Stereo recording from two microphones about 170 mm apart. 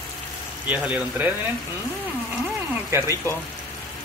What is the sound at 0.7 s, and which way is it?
Speech, 10° right (ahead or behind).